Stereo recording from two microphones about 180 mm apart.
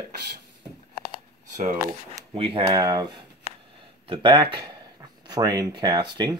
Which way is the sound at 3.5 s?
40° right (ahead or behind).